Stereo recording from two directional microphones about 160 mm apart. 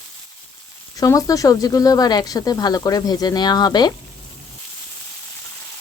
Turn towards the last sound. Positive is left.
turn(degrees=25)  # may be behind; listen again after turning